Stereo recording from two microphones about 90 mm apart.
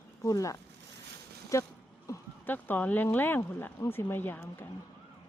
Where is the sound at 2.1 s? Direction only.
35° left (ahead or behind).